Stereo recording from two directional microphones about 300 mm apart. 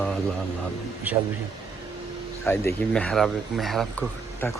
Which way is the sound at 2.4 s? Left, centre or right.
Centre.